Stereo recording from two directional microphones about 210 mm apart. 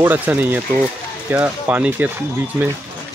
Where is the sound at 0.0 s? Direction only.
10° right (ahead or behind).